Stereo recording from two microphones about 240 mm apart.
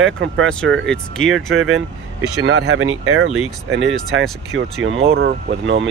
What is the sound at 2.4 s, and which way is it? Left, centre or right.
Speech, right.